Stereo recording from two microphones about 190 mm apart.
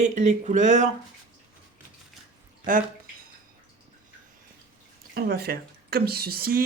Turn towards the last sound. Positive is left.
turn(degrees=-50)  # may be behind; listen again after turning